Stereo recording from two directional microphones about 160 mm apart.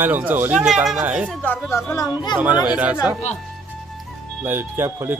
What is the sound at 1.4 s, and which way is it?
Speech, 10° left (ahead or behind).